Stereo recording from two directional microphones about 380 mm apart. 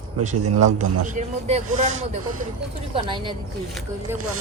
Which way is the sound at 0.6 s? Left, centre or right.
Centre.